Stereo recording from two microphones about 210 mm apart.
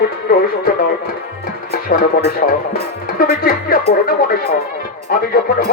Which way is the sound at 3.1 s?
45° left (ahead or behind).